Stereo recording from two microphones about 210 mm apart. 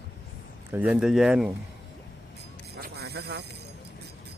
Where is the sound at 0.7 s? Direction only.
5° right (ahead or behind).